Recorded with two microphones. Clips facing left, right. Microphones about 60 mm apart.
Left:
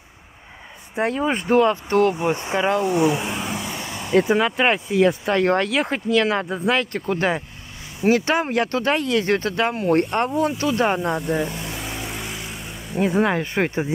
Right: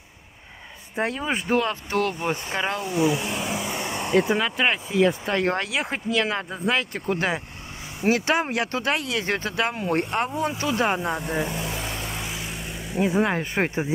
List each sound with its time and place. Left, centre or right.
0.9 s speech: centre
1.2 s speech: centre
2.0 s speech: centre
3.3 s vehicle: centre
3.8 s vehicle: right
4.1 s speech: centre
5.4 s speech: centre
9.2 s speech: right
9.5 s speech: centre
10.3 s speech: right
10.7 s vehicle: centre
12.9 s speech: centre